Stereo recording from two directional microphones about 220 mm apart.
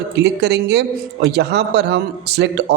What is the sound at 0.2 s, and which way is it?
Speech, 50° right (ahead or behind).